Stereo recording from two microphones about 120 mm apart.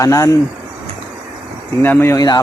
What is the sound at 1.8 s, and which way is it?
Speech, 15° left (ahead or behind).